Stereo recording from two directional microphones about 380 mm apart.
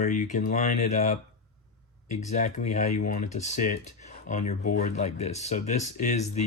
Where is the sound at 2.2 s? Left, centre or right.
Centre.